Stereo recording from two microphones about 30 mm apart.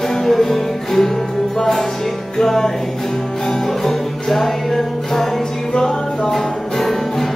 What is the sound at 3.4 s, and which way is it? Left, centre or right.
Music, centre.